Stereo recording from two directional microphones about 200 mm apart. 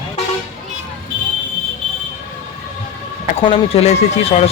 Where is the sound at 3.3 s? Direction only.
25° left (ahead or behind).